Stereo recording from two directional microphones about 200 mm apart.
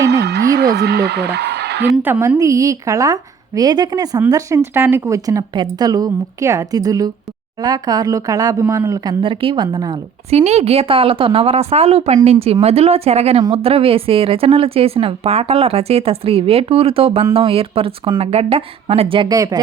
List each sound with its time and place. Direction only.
0.0 s music: 55° right (ahead or behind)
2.0 s a woman's voice: 10° right (ahead or behind)
10.2 s a woman's voice: 30° right (ahead or behind)